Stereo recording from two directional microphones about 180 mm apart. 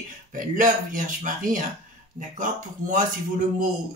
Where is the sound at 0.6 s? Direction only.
45° right (ahead or behind).